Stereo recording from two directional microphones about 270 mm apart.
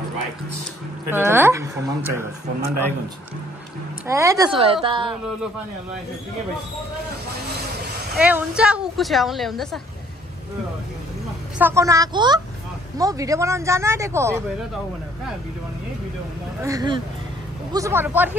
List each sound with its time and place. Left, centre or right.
1.1 s speech: centre
4.1 s speech: centre
8.2 s speech: centre
11.5 s speech: centre
16.6 s speech: centre